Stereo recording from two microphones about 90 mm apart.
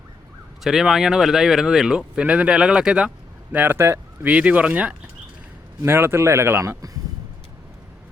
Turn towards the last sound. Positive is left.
turn(degrees=-25)  # may be behind; listen again after turning